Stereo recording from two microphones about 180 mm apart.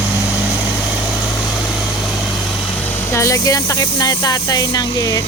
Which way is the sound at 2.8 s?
15° left (ahead or behind).